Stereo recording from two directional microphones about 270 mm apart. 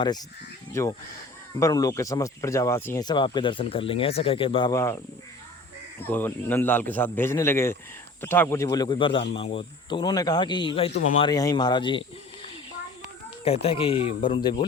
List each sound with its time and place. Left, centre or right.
0.7 s speech: centre
6.0 s speech: centre
13.4 s speech: left